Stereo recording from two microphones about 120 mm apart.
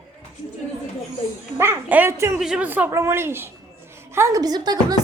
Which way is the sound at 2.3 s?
10° right (ahead or behind).